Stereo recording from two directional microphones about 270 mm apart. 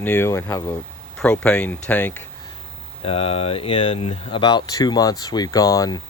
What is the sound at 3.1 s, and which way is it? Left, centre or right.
Speech, left.